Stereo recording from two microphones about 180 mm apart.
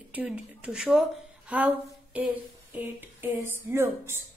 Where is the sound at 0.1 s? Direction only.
5° right (ahead or behind).